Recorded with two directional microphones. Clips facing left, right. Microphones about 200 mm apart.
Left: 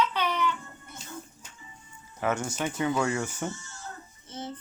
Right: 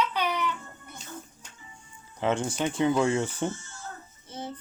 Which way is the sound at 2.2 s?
25° right (ahead or behind).